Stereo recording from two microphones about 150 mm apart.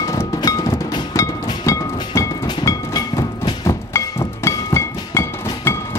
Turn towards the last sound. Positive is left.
turn(degrees=15)  # may be behind; listen again after turning